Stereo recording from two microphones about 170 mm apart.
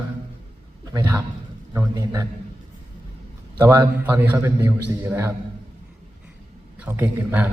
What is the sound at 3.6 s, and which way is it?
A man's voice, 15° right (ahead or behind).